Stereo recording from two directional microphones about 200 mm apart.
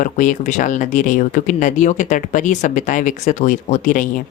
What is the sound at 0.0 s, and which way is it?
Speech, 40° left (ahead or behind).